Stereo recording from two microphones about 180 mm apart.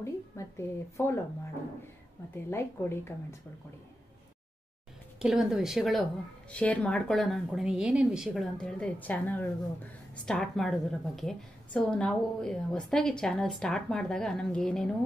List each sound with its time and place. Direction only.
0.0 s a sound: 15° left (ahead or behind)
2.3 s speech: 15° left (ahead or behind)
5.2 s a woman's voice: 5° right (ahead or behind)